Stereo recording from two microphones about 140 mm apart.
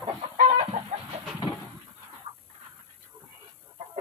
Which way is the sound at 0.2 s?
45° right (ahead or behind).